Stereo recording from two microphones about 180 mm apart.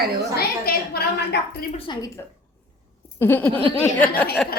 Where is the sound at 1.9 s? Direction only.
25° left (ahead or behind).